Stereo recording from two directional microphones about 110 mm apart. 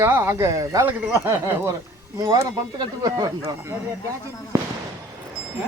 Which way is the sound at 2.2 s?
35° right (ahead or behind).